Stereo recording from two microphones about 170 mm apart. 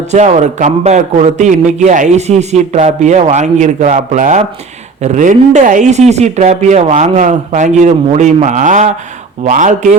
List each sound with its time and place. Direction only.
0.1 s a man's voice: 40° right (ahead or behind)